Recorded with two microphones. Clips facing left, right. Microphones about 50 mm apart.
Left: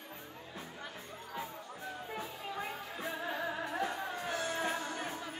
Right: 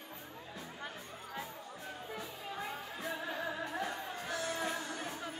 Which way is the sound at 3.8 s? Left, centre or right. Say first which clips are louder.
Left 3 dB; left.